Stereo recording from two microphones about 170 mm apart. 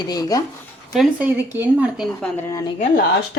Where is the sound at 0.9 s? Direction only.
10° right (ahead or behind).